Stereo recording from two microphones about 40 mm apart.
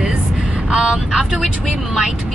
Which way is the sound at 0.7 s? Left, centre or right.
Centre.